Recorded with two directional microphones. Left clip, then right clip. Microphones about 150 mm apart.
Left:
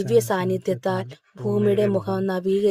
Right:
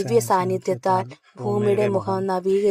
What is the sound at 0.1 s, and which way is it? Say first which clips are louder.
Speech: right 1 dB; 15° left (ahead or behind).